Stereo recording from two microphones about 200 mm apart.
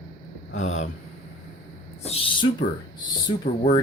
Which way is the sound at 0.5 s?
35° left (ahead or behind).